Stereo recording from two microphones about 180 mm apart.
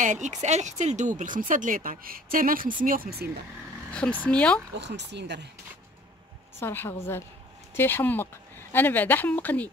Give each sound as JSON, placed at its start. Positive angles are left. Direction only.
{"t": 0.0, "sound": "speech", "side_deg": -45}
{"t": 3.9, "sound": "speech", "side_deg": 5}
{"t": 4.7, "sound": "speech", "side_deg": -70}
{"t": 6.6, "sound": "speech", "side_deg": 10}